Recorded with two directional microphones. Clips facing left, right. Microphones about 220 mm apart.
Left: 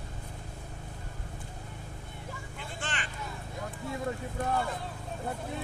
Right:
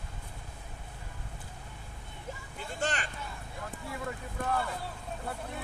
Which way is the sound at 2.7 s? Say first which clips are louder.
Right 6 dB; 40° right (ahead or behind).